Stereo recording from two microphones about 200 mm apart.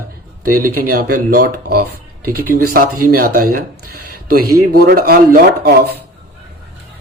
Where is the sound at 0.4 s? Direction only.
45° right (ahead or behind).